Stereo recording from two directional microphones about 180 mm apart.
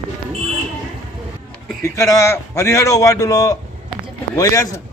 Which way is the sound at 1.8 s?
15° left (ahead or behind).